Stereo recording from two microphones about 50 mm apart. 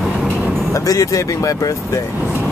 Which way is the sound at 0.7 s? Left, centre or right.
Left.